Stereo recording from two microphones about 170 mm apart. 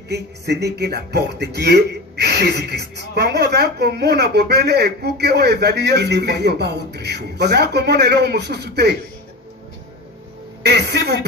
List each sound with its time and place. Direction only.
0.1 s speech: 80° right
10.6 s speech: 75° right (ahead or behind)